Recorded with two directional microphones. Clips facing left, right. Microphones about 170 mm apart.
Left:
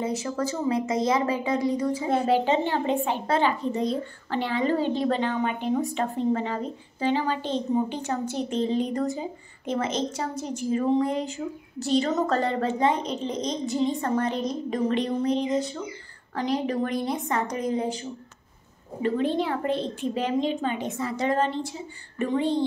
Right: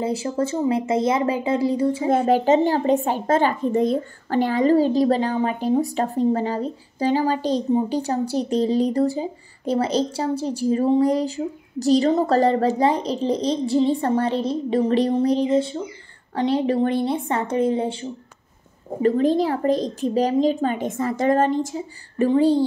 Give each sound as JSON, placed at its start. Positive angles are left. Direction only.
{"t": 0.0, "sound": "speech", "side_deg": -30}
{"t": 2.0, "sound": "speech", "side_deg": -45}
{"t": 19.0, "sound": "speech", "side_deg": -40}